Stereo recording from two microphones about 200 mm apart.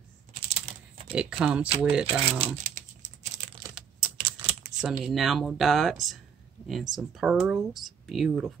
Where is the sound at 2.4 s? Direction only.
35° right (ahead or behind).